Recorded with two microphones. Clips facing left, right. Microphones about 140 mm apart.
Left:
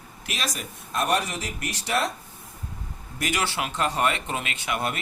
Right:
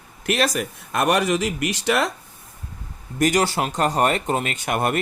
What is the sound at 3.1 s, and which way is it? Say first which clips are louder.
Speech: right 8 dB; 40° right (ahead or behind).